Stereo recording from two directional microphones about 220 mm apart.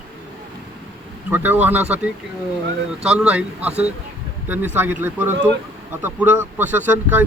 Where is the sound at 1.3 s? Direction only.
10° right (ahead or behind).